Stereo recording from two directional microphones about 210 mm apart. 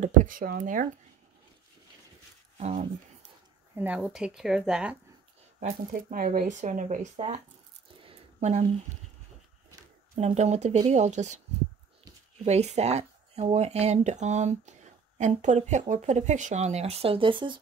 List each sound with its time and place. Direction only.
0.0 s speech: 40° right (ahead or behind)
2.5 s speech: 30° right (ahead or behind)
3.7 s speech: 10° right (ahead or behind)
5.6 s speech: 35° right (ahead or behind)
8.0 s a sound: 30° right (ahead or behind)
10.1 s speech: 30° right (ahead or behind)
12.4 s speech: 30° right (ahead or behind)